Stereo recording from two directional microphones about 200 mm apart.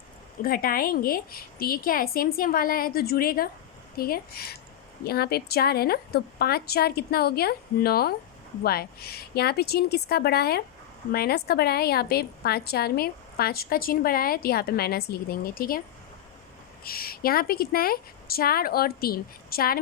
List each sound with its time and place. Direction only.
0.4 s a woman's voice: 45° left (ahead or behind)
16.8 s a woman's voice: 50° left (ahead or behind)